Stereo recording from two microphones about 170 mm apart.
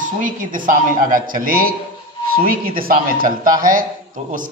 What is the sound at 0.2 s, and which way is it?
A man's voice, 55° right (ahead or behind).